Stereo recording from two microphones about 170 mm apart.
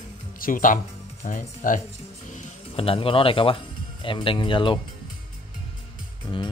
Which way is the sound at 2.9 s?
30° left (ahead or behind).